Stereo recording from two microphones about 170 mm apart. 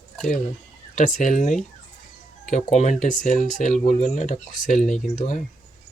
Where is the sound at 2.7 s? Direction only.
45° left (ahead or behind).